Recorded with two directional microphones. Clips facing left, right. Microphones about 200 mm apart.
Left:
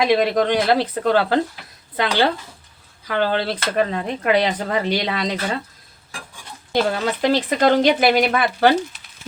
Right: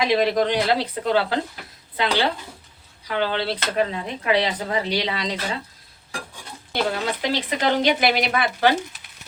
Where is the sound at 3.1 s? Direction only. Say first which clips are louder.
Left 3 dB; 45° left (ahead or behind).